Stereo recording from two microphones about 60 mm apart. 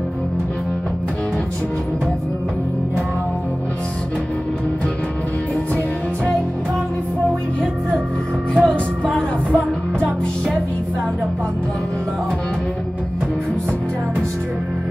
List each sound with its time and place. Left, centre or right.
8.6 s music: centre